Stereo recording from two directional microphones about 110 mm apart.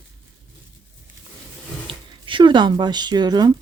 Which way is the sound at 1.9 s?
50° right (ahead or behind).